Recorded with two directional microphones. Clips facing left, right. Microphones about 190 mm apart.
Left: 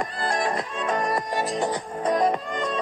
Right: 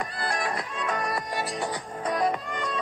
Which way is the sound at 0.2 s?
45° left (ahead or behind).